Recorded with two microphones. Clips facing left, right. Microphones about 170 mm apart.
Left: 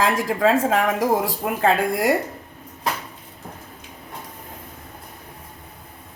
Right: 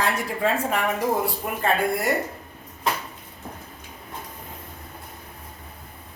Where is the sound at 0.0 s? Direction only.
90° left.